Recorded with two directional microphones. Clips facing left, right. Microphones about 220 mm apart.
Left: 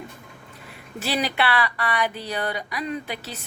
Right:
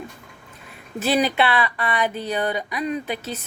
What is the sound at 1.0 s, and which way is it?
Speech, 20° right (ahead or behind).